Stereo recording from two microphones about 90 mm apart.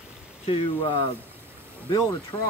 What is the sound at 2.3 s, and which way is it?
Speech, 30° left (ahead or behind).